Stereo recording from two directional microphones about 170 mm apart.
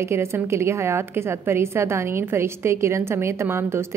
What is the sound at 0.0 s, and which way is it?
A woman's voice, 15° right (ahead or behind).